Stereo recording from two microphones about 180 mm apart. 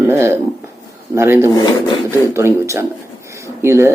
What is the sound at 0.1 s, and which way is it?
Speech, 15° right (ahead or behind).